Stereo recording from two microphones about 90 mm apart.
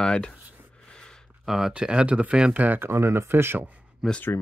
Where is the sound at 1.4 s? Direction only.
Centre (ahead or behind).